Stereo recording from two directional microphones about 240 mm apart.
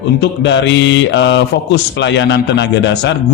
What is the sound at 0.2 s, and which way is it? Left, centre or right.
Speech, left.